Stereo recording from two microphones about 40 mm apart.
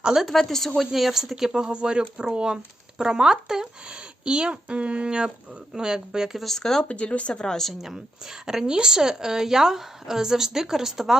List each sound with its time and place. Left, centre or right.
0.2 s a woman's voice: centre
1.7 s a woman's voice: right; by 6.4 s centre
6.6 s a woman's voice: centre
6.8 s speech: left
7.4 s a woman's voice: centre
7.7 s a woman's voice: centre
8.4 s a woman's voice: centre